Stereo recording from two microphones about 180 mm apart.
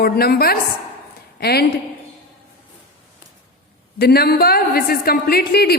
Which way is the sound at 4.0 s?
60° left (ahead or behind).